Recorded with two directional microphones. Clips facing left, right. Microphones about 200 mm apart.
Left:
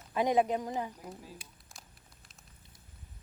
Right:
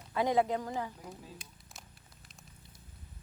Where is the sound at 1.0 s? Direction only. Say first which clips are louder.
Left 1 dB; 5° left (ahead or behind).